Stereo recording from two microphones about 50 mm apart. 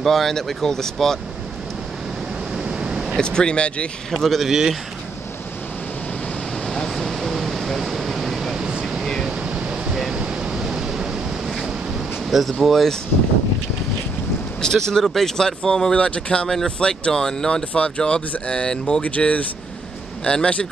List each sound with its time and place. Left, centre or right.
0.0 s speech: centre
2.5 s waves: centre
3.2 s speech: centre
4.1 s a man's voice: centre
4.5 s a man's voice: centre
6.6 s a sound: centre
8.5 s a sound: centre
9.2 s vehicle: centre
10.1 s waves: centre
12.3 s a man's voice: centre
14.6 s speech: centre
17.7 s speech: left
19.0 s speech: left